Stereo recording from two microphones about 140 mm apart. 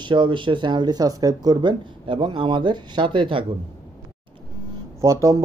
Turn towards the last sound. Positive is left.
turn(degrees=-20)  # may be behind; listen again after turning